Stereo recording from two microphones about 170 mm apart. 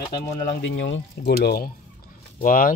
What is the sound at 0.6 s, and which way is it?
Speech, 90° left.